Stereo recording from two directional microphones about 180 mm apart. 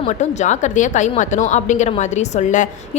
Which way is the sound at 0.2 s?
40° left (ahead or behind).